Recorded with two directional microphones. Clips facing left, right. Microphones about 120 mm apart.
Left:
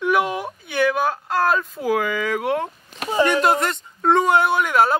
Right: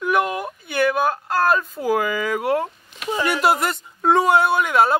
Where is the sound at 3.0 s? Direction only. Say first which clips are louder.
Left 5 dB; 30° left (ahead or behind).